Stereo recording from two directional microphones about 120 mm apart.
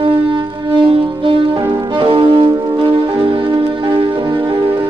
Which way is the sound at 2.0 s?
45° right (ahead or behind).